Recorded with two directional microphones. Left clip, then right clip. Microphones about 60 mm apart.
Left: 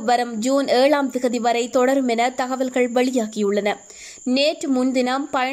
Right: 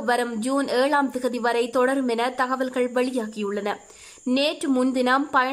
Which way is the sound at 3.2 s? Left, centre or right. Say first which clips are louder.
Left 7 dB; left.